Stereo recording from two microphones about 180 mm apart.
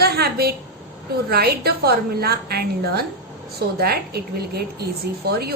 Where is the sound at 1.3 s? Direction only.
60° right (ahead or behind).